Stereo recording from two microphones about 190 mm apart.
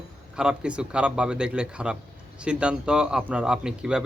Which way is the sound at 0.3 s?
5° right (ahead or behind).